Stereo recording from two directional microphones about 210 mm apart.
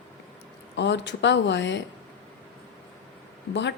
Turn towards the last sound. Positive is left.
turn(degrees=60)  # may be behind; listen again after turning